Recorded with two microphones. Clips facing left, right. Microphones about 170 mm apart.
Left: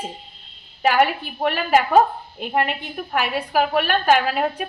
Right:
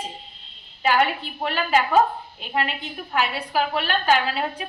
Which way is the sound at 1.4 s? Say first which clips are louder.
Left 4 dB; 45° left (ahead or behind).